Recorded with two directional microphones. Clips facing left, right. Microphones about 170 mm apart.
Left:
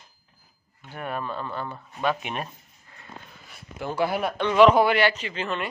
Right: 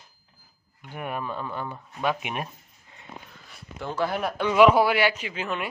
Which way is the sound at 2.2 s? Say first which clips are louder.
Even; 10° right (ahead or behind).